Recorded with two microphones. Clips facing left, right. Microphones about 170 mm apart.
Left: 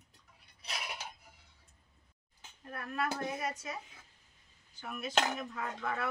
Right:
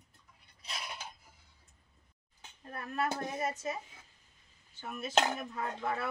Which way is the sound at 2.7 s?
25° right (ahead or behind).